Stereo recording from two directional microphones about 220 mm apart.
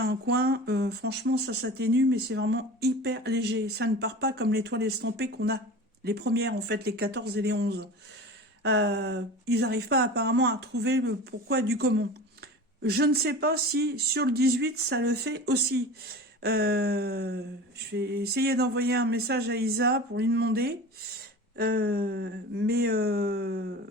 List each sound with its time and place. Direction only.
0.0 s speech: 45° right (ahead or behind)